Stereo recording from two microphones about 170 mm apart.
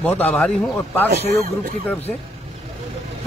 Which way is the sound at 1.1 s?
70° right (ahead or behind).